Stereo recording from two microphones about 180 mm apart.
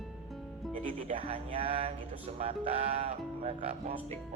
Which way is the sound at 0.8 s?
30° right (ahead or behind).